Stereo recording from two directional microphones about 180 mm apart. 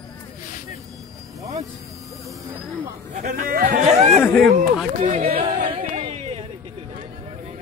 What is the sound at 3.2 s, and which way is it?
Speech, 50° right (ahead or behind).